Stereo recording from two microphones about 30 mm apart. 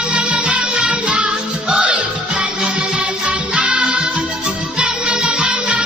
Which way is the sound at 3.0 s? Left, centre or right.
Right.